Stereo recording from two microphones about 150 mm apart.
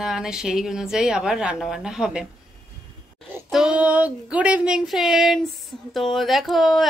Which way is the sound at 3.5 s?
5° right (ahead or behind).